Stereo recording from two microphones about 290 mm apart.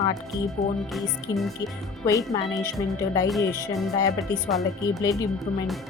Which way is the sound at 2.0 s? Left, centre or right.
Centre.